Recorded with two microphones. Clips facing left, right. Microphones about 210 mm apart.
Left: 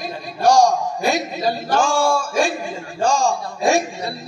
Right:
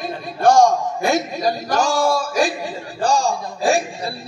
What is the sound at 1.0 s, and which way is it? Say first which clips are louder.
A man's voice: right 2 dB; 45° right (ahead or behind).